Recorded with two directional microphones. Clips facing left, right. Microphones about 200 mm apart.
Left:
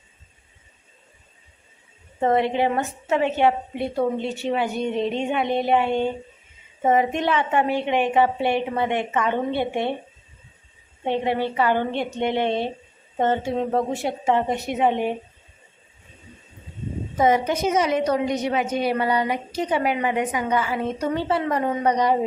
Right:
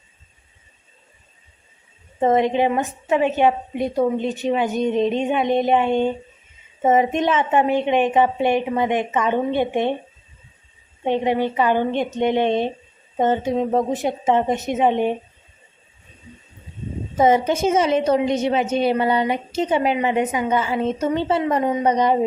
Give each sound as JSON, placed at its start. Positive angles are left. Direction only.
{"t": 2.1, "sound": "a woman's voice", "side_deg": -20}
{"t": 11.0, "sound": "a woman's voice", "side_deg": -15}
{"t": 17.2, "sound": "a woman's voice", "side_deg": -25}